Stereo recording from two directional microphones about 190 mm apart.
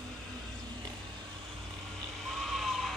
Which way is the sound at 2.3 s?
Centre (ahead or behind).